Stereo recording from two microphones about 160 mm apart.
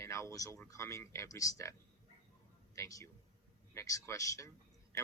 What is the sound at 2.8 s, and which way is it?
Speech, 20° left (ahead or behind).